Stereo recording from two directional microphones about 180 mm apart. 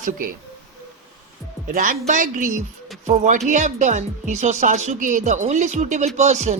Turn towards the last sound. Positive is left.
turn(degrees=-40)  # may be behind; listen again after turning